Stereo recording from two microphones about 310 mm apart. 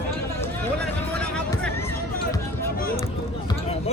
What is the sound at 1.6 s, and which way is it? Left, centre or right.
Music, centre.